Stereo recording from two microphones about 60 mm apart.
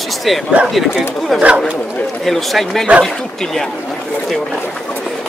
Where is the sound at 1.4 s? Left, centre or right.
Centre.